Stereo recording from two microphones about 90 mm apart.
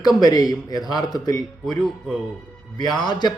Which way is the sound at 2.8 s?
50° left (ahead or behind).